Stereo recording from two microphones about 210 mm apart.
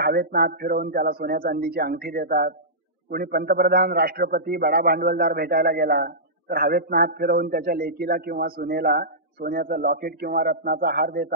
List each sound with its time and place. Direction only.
0.0 s a man's voice: 45° right (ahead or behind)